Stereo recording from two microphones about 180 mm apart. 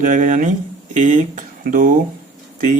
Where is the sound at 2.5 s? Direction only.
45° right (ahead or behind).